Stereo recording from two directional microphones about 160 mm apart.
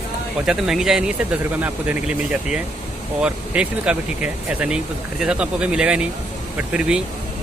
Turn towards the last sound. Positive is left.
turn(degrees=-5)  # may be behind; listen again after turning